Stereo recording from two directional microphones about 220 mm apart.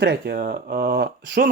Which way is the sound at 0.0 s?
45° right (ahead or behind).